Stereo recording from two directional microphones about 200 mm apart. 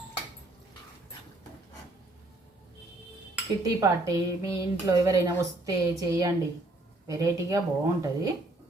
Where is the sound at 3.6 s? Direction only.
15° right (ahead or behind).